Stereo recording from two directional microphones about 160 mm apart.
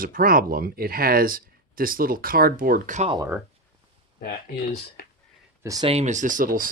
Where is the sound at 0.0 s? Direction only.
60° right (ahead or behind).